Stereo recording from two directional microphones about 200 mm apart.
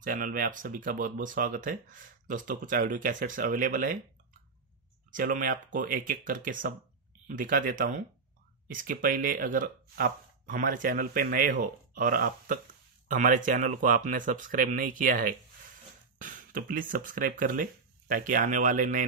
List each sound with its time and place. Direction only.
0.0 s speech: 40° right (ahead or behind)
5.1 s speech: 40° right (ahead or behind)